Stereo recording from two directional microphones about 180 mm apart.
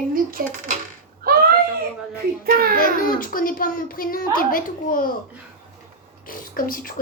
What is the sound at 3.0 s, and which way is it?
A woman's voice, 50° left (ahead or behind).